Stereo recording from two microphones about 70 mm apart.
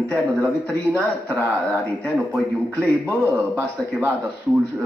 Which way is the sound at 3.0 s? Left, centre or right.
Right.